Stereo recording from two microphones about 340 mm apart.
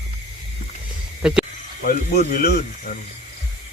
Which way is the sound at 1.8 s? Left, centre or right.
Left.